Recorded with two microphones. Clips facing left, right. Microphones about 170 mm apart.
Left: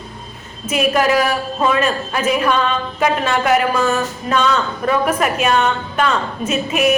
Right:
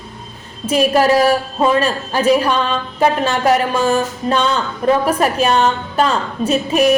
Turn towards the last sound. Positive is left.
turn(degrees=-35)  # may be behind; listen again after turning